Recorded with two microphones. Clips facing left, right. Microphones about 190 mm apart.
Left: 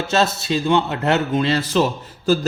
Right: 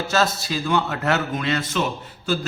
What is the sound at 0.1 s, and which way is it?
A man's voice, 25° left (ahead or behind).